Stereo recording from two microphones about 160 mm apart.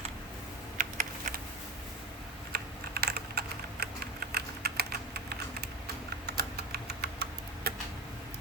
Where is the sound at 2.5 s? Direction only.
80° right.